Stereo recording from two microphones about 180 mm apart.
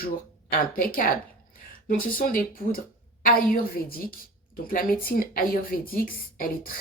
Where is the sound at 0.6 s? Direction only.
50° left (ahead or behind).